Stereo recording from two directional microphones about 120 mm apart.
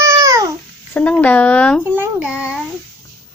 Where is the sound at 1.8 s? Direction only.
15° right (ahead or behind).